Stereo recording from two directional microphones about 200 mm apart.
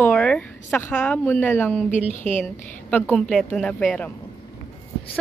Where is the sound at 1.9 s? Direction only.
35° left (ahead or behind).